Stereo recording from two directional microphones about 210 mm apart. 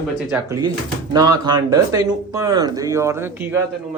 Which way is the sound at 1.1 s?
20° right (ahead or behind).